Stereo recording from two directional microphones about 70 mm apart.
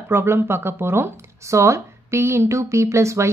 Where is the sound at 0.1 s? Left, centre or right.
Right.